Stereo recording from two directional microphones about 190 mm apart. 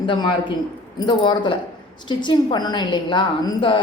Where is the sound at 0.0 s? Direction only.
25° left (ahead or behind).